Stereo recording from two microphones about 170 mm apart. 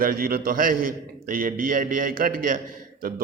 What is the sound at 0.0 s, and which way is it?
Speech, 60° right (ahead or behind).